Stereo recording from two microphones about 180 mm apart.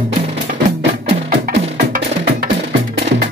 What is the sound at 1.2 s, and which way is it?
Music, 55° right (ahead or behind).